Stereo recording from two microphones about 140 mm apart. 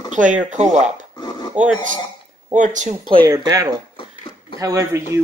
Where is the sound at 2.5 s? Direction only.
60° right (ahead or behind).